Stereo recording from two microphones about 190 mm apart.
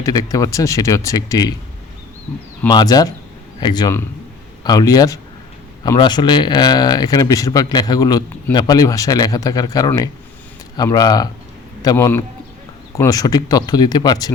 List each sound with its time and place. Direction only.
0.0 s speech: 20° left (ahead or behind)
2.6 s speech: 20° left (ahead or behind)